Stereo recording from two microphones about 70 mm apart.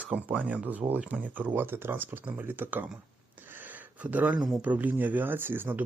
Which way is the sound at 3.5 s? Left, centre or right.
Right.